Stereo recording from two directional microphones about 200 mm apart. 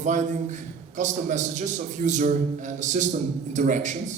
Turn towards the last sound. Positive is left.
turn(degrees=-35)  # may be behind; listen again after turning